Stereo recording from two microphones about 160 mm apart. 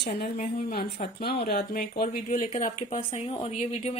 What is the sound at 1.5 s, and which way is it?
Speech, 75° left (ahead or behind).